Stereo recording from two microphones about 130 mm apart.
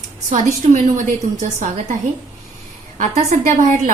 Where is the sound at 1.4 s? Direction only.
60° right (ahead or behind).